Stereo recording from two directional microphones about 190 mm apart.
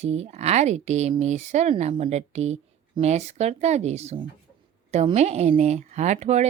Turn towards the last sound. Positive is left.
turn(degrees=-35)  # may be behind; listen again after turning